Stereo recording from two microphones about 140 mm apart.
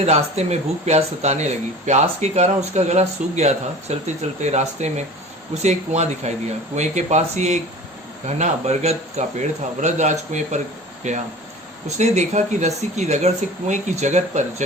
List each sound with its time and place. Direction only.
0.0 s speech: 50° right (ahead or behind)